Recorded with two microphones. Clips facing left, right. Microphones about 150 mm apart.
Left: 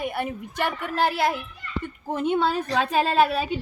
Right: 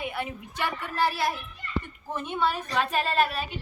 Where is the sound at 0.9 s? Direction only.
60° left (ahead or behind); by 2.8 s 80° left.